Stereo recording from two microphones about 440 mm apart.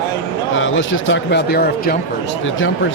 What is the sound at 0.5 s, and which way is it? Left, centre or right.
Speech, left.